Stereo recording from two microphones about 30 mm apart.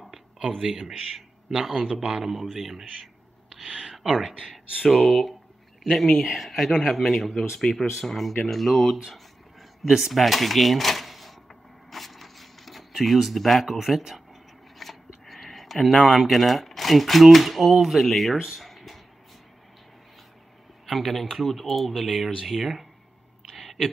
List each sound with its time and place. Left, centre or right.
0.6 s a man's voice: centre
3.4 s a sound: centre
3.9 s speech: centre
4.4 s speech: right
4.8 s speech: centre
7.7 s speech: left
8.0 s speech: centre
9.8 s speech: centre
10.1 s speech: centre
11.9 s a sound: centre
16.2 s speech: centre
18.6 s a sound: centre
20.8 s speech: centre
23.5 s a sound: centre